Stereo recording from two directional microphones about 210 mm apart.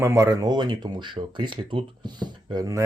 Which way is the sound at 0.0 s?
15° right (ahead or behind).